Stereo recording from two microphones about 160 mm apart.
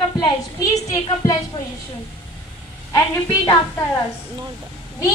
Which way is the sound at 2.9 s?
15° left (ahead or behind).